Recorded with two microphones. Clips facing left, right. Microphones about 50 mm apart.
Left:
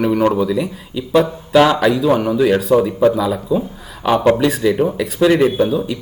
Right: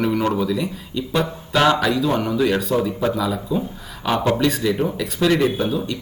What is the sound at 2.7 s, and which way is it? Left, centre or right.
Speech, left.